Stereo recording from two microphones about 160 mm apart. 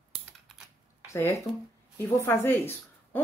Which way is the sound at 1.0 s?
20° left (ahead or behind).